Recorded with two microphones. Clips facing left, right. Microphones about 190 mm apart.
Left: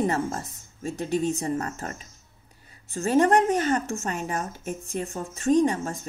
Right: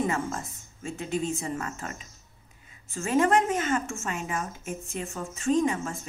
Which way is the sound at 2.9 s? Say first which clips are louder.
Left 3 dB; 35° left (ahead or behind).